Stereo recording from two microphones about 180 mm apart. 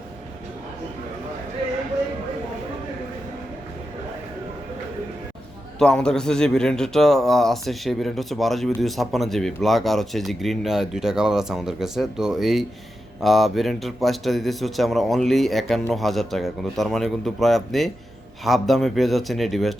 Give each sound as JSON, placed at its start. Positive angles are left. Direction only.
{"t": 5.8, "sound": "speech", "side_deg": 5}